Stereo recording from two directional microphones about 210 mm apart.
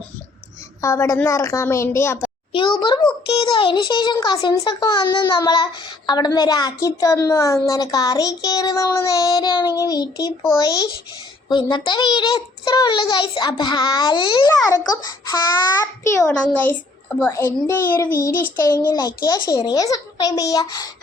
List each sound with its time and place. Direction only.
0.8 s a child's voice: 15° left (ahead or behind)